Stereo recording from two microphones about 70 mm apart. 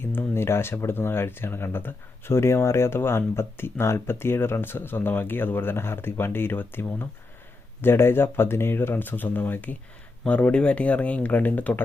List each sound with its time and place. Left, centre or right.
0.0 s speech: left